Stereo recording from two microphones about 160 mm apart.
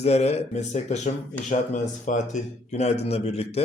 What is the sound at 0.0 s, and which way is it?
Speech, 40° left (ahead or behind).